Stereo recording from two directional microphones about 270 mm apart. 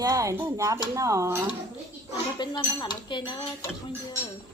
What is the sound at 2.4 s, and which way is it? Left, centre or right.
Dishes, centre.